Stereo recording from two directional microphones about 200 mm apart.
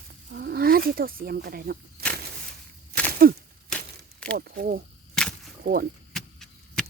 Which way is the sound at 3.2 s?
45° right (ahead or behind).